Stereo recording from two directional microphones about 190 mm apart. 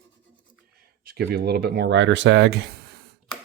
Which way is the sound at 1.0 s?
60° right (ahead or behind).